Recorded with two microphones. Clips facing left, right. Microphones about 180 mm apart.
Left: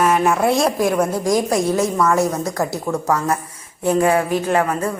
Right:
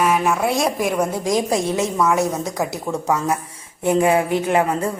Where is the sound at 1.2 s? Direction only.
25° right (ahead or behind).